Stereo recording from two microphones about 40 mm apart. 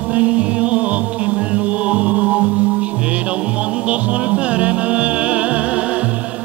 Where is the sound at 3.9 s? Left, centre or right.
Right.